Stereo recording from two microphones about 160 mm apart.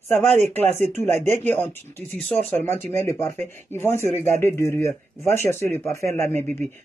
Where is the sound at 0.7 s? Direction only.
45° right (ahead or behind).